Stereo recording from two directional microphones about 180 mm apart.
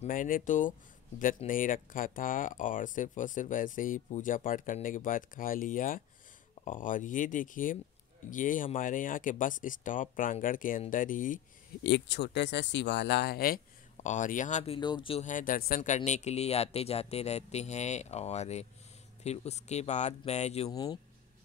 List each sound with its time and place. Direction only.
0.0 s speech: 50° left (ahead or behind)
11.8 s speech: 75° left (ahead or behind); by 13.6 s 60° left (ahead or behind)
14.0 s speech: 45° left (ahead or behind)
14.8 s speech: 25° left (ahead or behind)
15.2 s speech: 50° left (ahead or behind)
20.7 s speech: 20° left (ahead or behind)